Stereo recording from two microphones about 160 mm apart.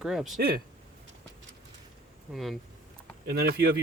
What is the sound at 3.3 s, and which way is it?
Speech, 80° right.